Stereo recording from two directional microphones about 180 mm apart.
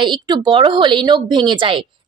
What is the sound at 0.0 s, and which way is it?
A woman's voice, 25° right (ahead or behind).